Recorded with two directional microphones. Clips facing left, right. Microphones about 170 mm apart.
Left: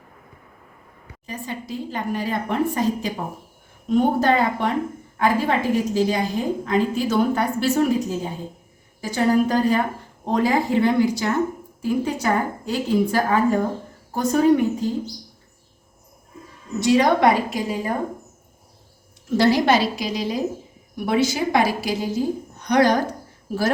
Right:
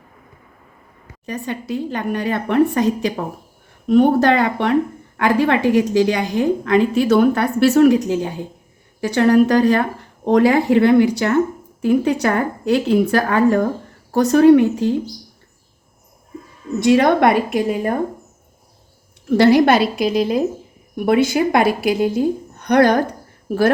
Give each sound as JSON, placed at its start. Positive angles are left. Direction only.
{"t": 1.3, "sound": "a woman's voice", "side_deg": -65}
{"t": 16.8, "sound": "a woman's voice", "side_deg": -55}
{"t": 19.3, "sound": "a woman's voice", "side_deg": -60}